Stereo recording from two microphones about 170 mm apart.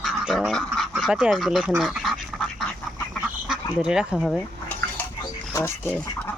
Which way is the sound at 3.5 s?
5° right (ahead or behind).